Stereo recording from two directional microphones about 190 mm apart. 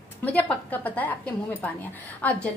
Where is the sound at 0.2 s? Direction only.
10° left (ahead or behind).